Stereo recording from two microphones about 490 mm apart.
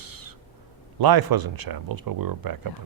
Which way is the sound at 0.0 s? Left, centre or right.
Right.